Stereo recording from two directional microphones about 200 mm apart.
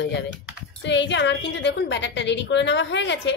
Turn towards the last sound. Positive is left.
turn(degrees=60)  # may be behind; listen again after turning